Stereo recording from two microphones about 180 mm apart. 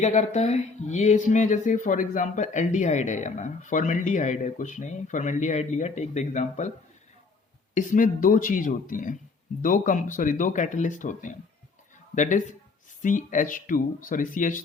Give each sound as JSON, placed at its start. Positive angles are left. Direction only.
{"t": 0.0, "sound": "speech", "side_deg": 40}
{"t": 7.7, "sound": "speech", "side_deg": 45}